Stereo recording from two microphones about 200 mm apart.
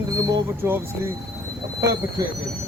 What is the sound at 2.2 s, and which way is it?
Speech, 15° right (ahead or behind).